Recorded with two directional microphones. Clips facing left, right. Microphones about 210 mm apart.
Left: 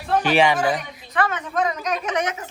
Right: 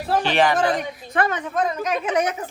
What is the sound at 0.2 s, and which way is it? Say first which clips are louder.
Speech: left 1 dB; 5° left (ahead or behind).